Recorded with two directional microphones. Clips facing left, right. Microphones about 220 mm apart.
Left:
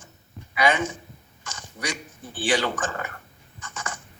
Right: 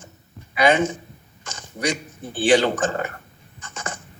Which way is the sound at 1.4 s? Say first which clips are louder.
Right 7 dB; 25° right (ahead or behind).